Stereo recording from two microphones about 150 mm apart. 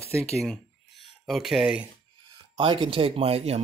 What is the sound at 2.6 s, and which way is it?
Speech, 35° right (ahead or behind).